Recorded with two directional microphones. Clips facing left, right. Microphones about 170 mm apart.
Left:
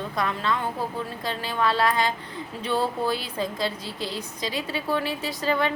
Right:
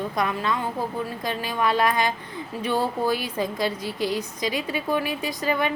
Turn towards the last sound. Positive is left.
turn(degrees=-15)  # may be behind; listen again after turning